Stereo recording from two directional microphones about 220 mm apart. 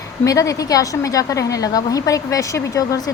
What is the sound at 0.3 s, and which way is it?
A woman's voice, 15° left (ahead or behind).